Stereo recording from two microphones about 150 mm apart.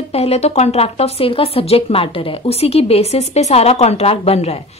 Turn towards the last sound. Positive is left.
turn(degrees=45)  # may be behind; listen again after turning